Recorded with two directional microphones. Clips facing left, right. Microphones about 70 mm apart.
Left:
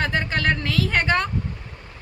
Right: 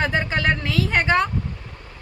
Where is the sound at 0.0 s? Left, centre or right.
Centre.